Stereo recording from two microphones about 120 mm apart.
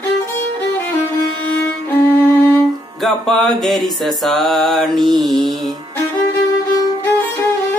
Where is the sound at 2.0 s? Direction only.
25° left (ahead or behind).